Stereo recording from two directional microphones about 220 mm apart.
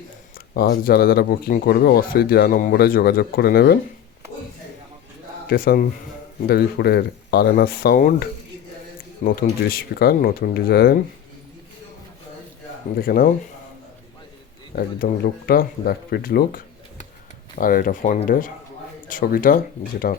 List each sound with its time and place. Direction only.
0.5 s speech: 45° left (ahead or behind)
5.5 s speech: 40° left (ahead or behind)
13.0 s speech: 40° left (ahead or behind)
14.8 s speech: 40° left (ahead or behind)